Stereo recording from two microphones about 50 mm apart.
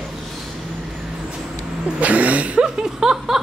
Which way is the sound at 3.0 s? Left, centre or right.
Centre.